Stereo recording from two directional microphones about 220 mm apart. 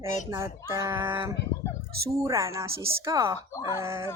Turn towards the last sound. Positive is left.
turn(degrees=-15)  # may be behind; listen again after turning